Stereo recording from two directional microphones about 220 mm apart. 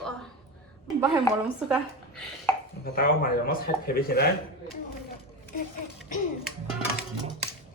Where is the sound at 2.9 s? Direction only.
40° left (ahead or behind).